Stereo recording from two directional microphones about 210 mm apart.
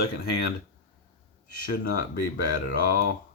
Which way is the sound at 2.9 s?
45° left (ahead or behind).